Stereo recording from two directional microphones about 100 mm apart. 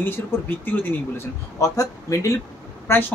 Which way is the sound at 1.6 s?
35° left (ahead or behind).